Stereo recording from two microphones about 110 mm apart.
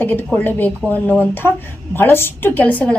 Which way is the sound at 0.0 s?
20° left (ahead or behind).